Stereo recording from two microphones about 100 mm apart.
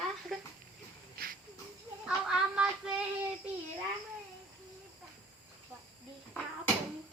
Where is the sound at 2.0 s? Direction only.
5° right (ahead or behind).